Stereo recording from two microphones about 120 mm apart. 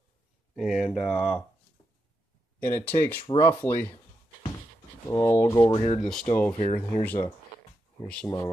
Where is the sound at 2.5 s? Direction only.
15° left (ahead or behind).